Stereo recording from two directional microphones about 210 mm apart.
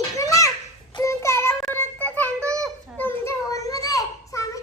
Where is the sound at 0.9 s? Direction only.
15° left (ahead or behind).